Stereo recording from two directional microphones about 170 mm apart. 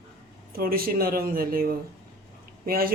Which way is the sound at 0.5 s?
60° right (ahead or behind).